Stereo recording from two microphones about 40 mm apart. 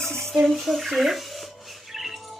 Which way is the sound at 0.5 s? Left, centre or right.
Centre.